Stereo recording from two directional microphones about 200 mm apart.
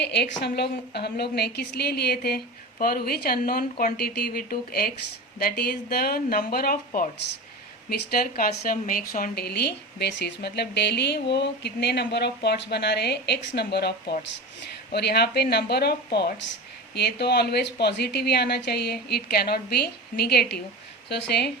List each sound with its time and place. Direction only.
0.0 s a woman's voice: 60° left (ahead or behind)